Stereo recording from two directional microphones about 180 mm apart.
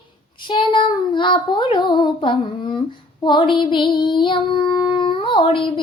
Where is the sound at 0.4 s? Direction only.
25° left (ahead or behind).